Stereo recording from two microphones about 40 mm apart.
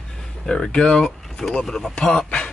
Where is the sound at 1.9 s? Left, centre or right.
Left.